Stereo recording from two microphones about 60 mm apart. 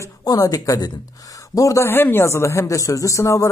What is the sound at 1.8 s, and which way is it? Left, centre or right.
Speech, left.